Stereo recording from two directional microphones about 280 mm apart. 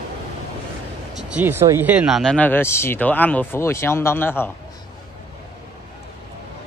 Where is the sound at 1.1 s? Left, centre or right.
Centre.